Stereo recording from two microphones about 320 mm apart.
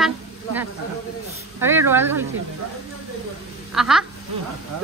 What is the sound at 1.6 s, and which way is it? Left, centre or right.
Speech, centre.